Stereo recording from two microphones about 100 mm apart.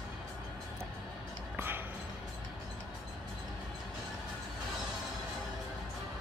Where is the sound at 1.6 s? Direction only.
20° right (ahead or behind).